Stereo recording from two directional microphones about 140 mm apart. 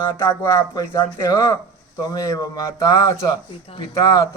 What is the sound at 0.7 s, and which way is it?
Speech, 25° left (ahead or behind).